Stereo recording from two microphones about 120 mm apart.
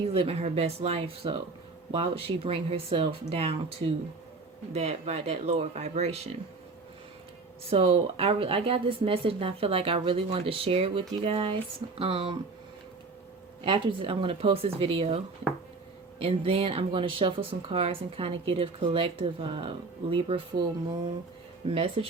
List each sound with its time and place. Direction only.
0.1 s speech: 55° right (ahead or behind)
4.7 s speech: 65° right (ahead or behind)
7.7 s speech: 50° right (ahead or behind)
13.7 s speech: 45° right (ahead or behind)
16.2 s speech: 55° right (ahead or behind)
21.7 s speech: 50° right (ahead or behind)